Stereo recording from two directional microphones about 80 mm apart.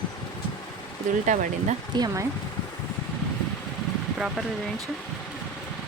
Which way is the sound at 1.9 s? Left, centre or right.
Right.